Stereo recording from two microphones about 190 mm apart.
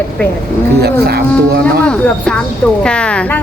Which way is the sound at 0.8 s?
55° right (ahead or behind).